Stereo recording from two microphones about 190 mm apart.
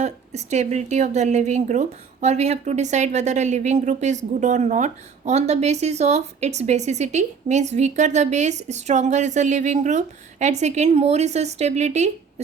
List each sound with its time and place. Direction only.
0.0 s a woman's voice: 35° right (ahead or behind)